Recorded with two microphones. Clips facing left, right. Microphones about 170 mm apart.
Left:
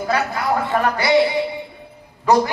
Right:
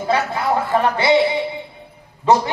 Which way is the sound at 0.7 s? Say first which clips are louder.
Right 4 dB; 25° right (ahead or behind).